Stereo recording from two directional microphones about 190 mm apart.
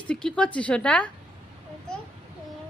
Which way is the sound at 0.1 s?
5° left (ahead or behind).